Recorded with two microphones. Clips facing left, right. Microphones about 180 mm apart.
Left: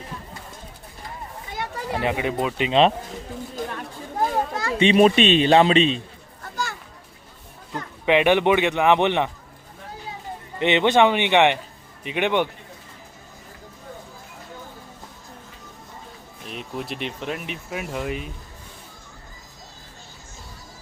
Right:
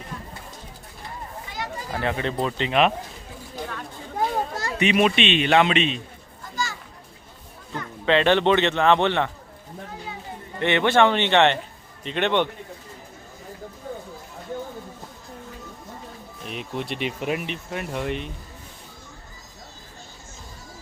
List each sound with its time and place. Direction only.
1.5 s children playing: 55° left (ahead or behind)
2.0 s a man's voice: 15° left (ahead or behind)
2.6 s speech: 25° left (ahead or behind)
4.8 s speech: 30° left (ahead or behind)
6.4 s children playing: 60° left (ahead or behind)
8.0 s a man's voice: 15° left (ahead or behind)
10.6 s a man's voice: 20° left (ahead or behind)
16.5 s speech: centre (ahead or behind)
17.4 s speech: 5° left (ahead or behind)